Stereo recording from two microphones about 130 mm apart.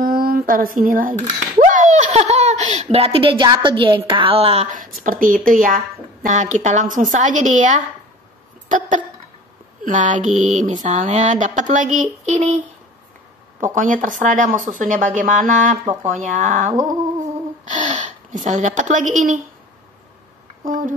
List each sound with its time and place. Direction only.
0.0 s a woman's voice: 90° right; by 4.6 s 45° right (ahead or behind)
5.0 s speech: 90° right
6.2 s mantra: 70° right (ahead or behind)
8.6 s a sound: 75° right (ahead or behind)
9.8 s mantra: 80° right
13.7 s speech: 90° right
17.6 s a woman's voice: 70° right (ahead or behind)
20.6 s speech: 90° right